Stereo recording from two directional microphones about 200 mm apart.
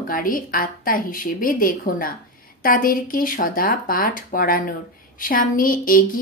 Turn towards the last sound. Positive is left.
turn(degrees=45)  # may be behind; listen again after turning